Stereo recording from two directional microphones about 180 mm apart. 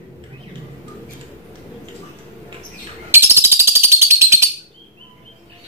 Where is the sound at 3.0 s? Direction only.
10° right (ahead or behind).